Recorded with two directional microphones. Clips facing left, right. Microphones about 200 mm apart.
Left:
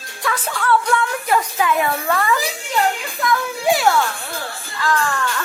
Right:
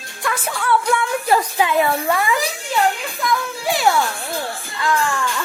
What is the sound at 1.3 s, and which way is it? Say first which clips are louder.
Speech: right 1 dB; 30° right (ahead or behind).